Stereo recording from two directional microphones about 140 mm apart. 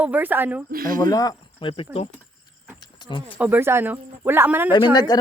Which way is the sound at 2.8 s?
30° left (ahead or behind).